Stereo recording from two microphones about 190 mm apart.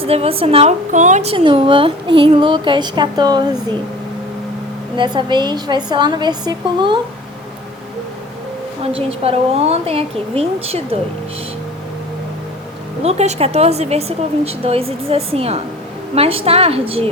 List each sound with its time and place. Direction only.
0.0 s a woman's voice: 30° right (ahead or behind)
4.9 s a woman's voice: 25° right (ahead or behind)
9.0 s a woman's voice: 30° right (ahead or behind)
13.0 s a woman's voice: 35° right (ahead or behind)